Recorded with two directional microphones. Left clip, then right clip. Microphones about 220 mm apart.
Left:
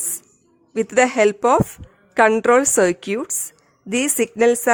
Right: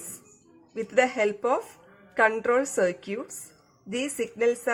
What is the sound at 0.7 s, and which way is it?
A woman's voice, 50° left (ahead or behind).